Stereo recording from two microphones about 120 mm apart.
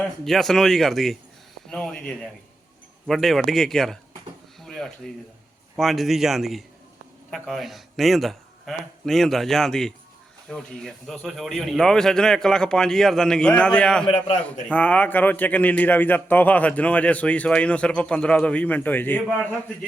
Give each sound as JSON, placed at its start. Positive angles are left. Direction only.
{"t": 0.3, "sound": "speech", "side_deg": 0}
{"t": 4.6, "sound": "a sound", "side_deg": 5}
{"t": 5.7, "sound": "speech", "side_deg": 0}
{"t": 14.1, "sound": "a man's voice", "side_deg": 65}
{"t": 14.7, "sound": "a man's voice", "side_deg": 10}